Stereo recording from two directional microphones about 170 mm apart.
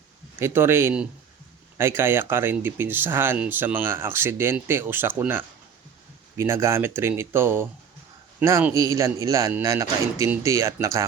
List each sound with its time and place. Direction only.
0.3 s speech: 15° right (ahead or behind)